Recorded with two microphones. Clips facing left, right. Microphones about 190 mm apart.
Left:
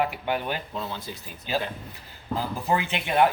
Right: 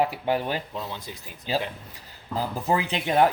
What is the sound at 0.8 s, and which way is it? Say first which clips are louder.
Speech: left 1 dB; 15° right (ahead or behind).